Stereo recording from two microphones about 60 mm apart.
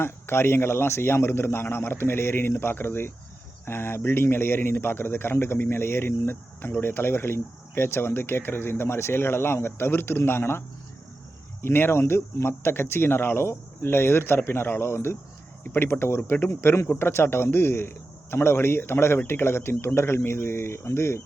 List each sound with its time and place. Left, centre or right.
0.0 s a man's voice: left
11.6 s a man's voice: left